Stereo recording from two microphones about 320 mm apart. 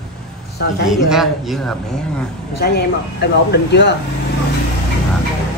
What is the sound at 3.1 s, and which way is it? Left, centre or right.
Speech, left.